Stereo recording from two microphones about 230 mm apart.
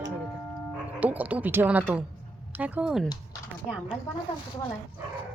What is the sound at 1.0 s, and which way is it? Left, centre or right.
A woman's voice, centre.